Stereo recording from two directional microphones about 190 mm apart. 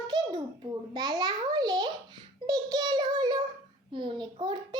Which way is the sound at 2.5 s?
20° right (ahead or behind).